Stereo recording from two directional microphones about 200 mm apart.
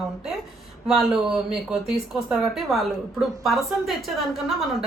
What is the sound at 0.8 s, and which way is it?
Speech, centre (ahead or behind).